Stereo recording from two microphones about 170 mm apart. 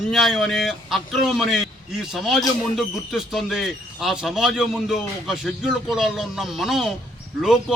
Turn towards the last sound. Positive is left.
turn(degrees=-5)  # may be behind; listen again after turning